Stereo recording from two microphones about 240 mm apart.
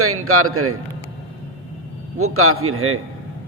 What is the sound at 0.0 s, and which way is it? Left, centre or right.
Speech, right.